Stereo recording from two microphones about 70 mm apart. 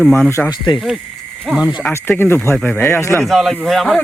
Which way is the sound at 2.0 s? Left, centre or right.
Left.